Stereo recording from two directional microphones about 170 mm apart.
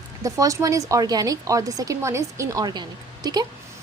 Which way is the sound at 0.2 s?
20° right (ahead or behind).